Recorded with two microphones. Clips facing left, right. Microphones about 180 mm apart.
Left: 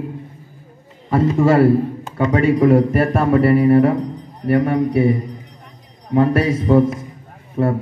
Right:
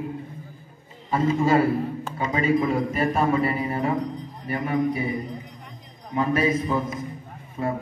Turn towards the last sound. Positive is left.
turn(degrees=65)  # may be behind; listen again after turning